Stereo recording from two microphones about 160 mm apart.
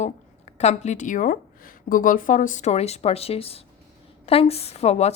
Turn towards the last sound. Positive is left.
turn(degrees=40)  # may be behind; listen again after turning